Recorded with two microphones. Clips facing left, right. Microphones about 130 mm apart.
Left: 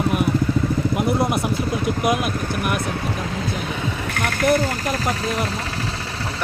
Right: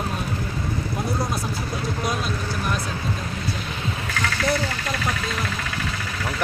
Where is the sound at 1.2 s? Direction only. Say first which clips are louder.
Left 6 dB; 60° left (ahead or behind).